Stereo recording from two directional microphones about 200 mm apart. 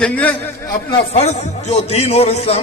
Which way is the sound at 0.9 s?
35° left (ahead or behind).